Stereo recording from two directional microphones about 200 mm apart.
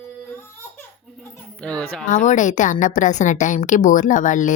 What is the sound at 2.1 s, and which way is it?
A woman's voice, 40° left (ahead or behind).